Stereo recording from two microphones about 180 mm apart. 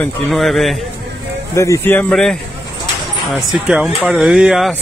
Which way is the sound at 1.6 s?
15° left (ahead or behind).